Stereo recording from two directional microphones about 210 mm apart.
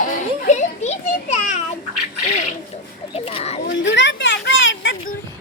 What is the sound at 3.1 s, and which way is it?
Speech, 30° left (ahead or behind).